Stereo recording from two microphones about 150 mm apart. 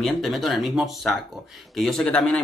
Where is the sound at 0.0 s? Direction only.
Centre (ahead or behind).